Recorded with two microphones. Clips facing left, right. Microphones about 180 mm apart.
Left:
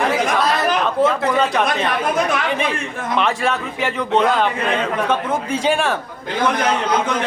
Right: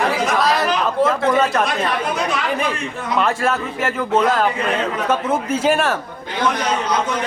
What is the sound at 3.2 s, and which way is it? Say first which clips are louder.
Speech: right 1 dB; centre (ahead or behind).